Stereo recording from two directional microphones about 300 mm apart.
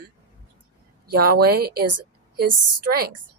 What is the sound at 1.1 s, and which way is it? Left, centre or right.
A woman's voice, right.